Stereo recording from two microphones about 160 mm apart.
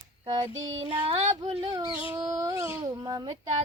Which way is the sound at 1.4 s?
40° right (ahead or behind).